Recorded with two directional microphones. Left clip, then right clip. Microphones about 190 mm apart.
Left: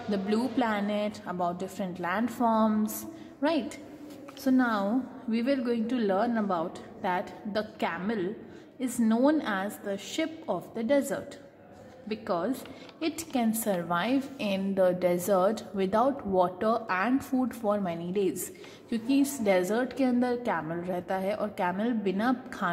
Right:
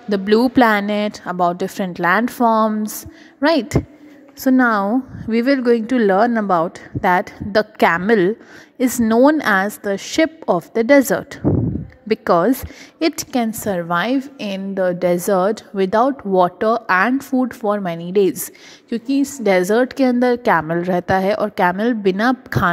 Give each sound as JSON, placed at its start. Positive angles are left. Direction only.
{"t": 0.1, "sound": "a woman's voice", "side_deg": -45}